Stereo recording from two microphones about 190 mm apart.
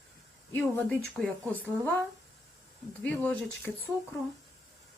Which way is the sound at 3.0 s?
10° left (ahead or behind).